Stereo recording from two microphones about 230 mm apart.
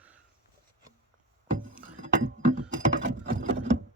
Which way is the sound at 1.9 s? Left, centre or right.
Right.